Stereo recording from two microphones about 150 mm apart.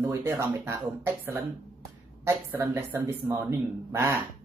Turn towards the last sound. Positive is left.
turn(degrees=-15)  # may be behind; listen again after turning